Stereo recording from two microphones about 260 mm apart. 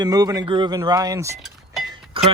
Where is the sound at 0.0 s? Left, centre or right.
Centre.